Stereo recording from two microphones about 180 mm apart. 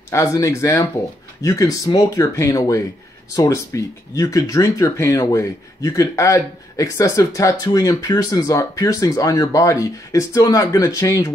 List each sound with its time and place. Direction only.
0.1 s speech: 15° left (ahead or behind)